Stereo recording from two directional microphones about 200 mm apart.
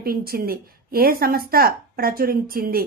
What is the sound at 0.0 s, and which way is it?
Speech, 45° right (ahead or behind).